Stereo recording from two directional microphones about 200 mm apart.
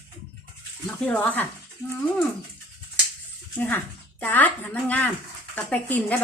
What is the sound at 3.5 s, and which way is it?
Speech, 10° left (ahead or behind).